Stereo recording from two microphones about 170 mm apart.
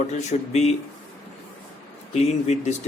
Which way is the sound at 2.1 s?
40° left (ahead or behind).